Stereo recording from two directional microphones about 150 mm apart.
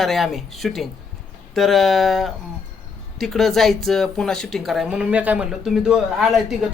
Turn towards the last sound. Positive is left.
turn(degrees=-5)  # may be behind; listen again after turning